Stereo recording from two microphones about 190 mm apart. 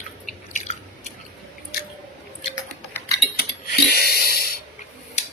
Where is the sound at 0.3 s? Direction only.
40° left (ahead or behind).